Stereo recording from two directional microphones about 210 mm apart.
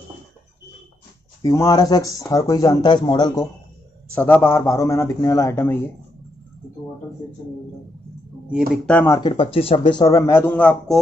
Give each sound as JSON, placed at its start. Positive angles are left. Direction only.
{"t": 1.4, "sound": "speech", "side_deg": 15}
{"t": 4.1, "sound": "speech", "side_deg": 10}
{"t": 8.5, "sound": "speech", "side_deg": -5}
{"t": 8.9, "sound": "speech", "side_deg": 15}
{"t": 9.3, "sound": "speech", "side_deg": 25}